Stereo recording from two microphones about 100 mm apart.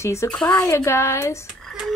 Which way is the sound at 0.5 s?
30° left (ahead or behind).